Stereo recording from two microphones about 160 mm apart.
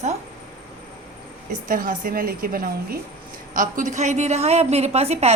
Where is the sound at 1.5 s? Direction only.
55° right (ahead or behind); by 5.3 s 40° right (ahead or behind).